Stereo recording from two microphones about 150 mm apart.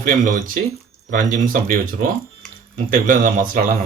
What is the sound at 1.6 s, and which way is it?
Speech, 70° right (ahead or behind).